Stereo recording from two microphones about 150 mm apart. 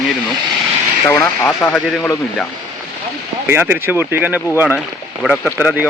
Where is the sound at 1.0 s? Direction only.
15° left (ahead or behind).